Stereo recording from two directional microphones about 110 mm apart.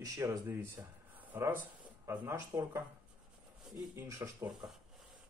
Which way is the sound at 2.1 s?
20° right (ahead or behind).